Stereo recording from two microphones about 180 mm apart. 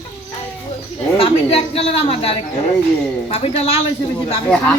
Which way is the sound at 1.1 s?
30° left (ahead or behind).